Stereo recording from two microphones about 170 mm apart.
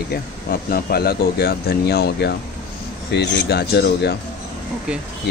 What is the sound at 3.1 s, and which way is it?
Speech, 85° left.